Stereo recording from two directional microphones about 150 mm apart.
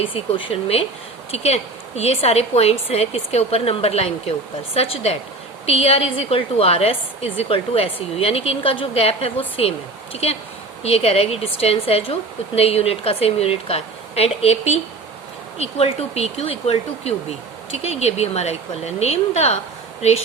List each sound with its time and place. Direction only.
0.0 s a woman's voice: 35° left (ahead or behind)